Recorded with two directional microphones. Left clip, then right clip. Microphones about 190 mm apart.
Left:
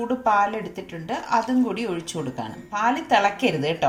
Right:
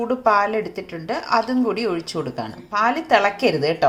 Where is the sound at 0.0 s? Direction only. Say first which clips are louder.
Right 3 dB; 20° right (ahead or behind).